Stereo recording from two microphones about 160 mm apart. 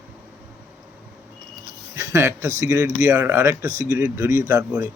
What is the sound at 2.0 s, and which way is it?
Speech, 15° right (ahead or behind).